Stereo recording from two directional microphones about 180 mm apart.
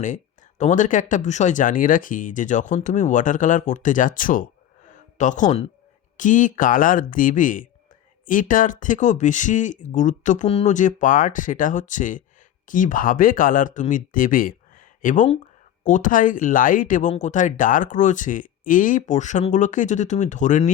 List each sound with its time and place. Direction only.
0.6 s speech: 45° left (ahead or behind)
4.9 s a sound: 45° left (ahead or behind)
6.1 s speech: 45° left (ahead or behind)